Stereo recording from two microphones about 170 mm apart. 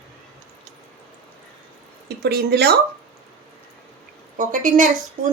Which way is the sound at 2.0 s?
75° right (ahead or behind).